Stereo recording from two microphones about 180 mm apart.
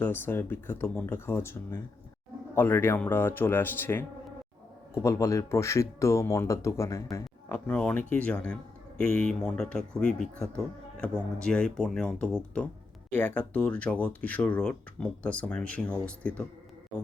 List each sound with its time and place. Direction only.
0.0 s speech: 10° left (ahead or behind)
5.0 s speech: 15° left (ahead or behind)